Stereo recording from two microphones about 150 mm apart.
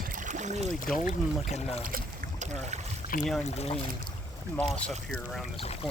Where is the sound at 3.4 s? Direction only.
45° left (ahead or behind).